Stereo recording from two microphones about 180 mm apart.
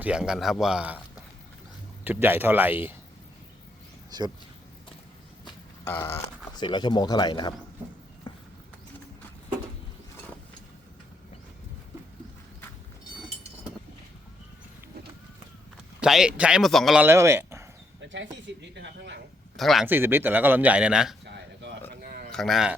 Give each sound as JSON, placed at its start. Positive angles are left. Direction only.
{"t": 0.0, "sound": "speech", "side_deg": -5}
{"t": 2.0, "sound": "speech", "side_deg": -10}
{"t": 5.8, "sound": "a sound", "side_deg": 15}
{"t": 6.6, "sound": "speech", "side_deg": 25}
{"t": 8.3, "sound": "a sound", "side_deg": 25}
{"t": 16.0, "sound": "speech", "side_deg": -5}
{"t": 18.0, "sound": "speech", "side_deg": -90}
{"t": 19.5, "sound": "speech", "side_deg": 0}
{"t": 19.9, "sound": "speech", "side_deg": -10}
{"t": 21.2, "sound": "a sound", "side_deg": -70}
{"t": 22.0, "sound": "a sound", "side_deg": -55}
{"t": 22.3, "sound": "speech", "side_deg": 0}